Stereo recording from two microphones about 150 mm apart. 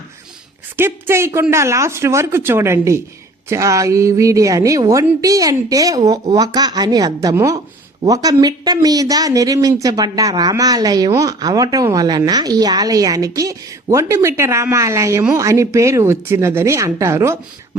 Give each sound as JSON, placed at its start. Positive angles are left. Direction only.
{"t": 0.8, "sound": "speech", "side_deg": -15}